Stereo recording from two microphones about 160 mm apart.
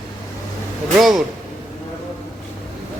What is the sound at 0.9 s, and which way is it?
Speech, centre (ahead or behind).